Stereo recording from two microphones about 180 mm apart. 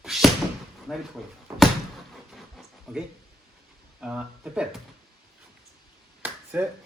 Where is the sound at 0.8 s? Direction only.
Centre (ahead or behind).